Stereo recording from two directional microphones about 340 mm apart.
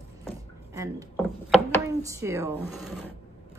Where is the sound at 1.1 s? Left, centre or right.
Centre.